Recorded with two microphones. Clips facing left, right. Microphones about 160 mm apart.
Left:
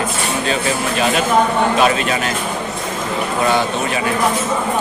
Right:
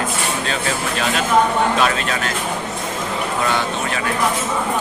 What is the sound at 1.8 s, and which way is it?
Speech, 10° left (ahead or behind).